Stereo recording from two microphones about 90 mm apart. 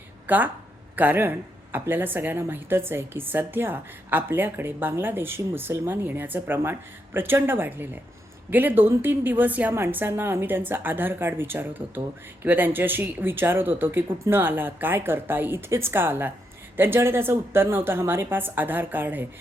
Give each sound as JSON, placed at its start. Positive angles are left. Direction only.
{"t": 0.3, "sound": "a woman's voice", "side_deg": -20}